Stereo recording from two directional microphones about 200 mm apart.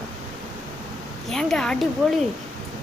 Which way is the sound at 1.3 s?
5° left (ahead or behind).